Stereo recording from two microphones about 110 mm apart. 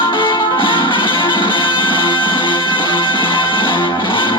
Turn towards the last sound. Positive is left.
turn(degrees=50)  # may be behind; listen again after turning